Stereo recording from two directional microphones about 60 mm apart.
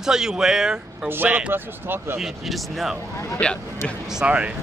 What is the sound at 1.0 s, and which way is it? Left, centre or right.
Speech, right.